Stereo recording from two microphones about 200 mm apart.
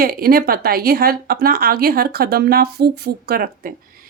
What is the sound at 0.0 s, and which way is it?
Speech, 50° right (ahead or behind).